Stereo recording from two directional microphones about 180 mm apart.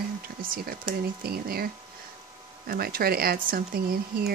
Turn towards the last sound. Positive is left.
turn(degrees=-60)  # may be behind; listen again after turning